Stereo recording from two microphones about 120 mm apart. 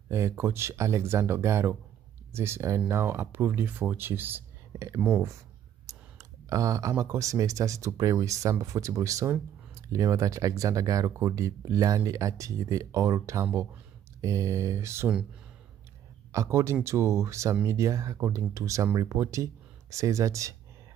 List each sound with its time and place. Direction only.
0.1 s speech: 20° right (ahead or behind)
6.5 s speech: 25° right (ahead or behind)
16.3 s speech: 25° right (ahead or behind)